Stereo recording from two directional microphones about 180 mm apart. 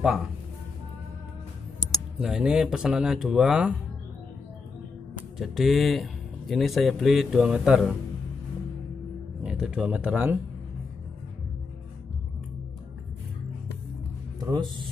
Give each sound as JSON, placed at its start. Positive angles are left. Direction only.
{"t": 2.1, "sound": "speech", "side_deg": -5}
{"t": 5.4, "sound": "speech", "side_deg": 0}
{"t": 9.4, "sound": "speech", "side_deg": -5}
{"t": 14.4, "sound": "speech", "side_deg": -25}